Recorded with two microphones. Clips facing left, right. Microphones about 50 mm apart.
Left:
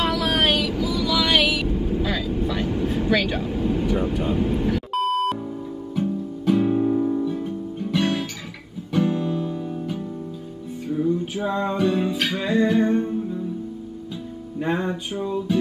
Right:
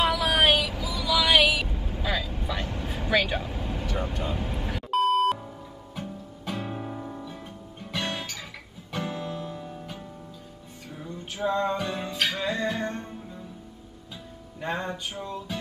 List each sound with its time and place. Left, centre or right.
0.0 s music: centre
5.9 s guitar: centre
8.9 s music: centre
14.6 s music: centre